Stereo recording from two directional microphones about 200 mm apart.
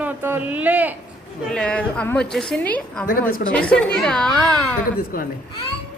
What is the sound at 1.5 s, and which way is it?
A woman's voice, 5° left (ahead or behind).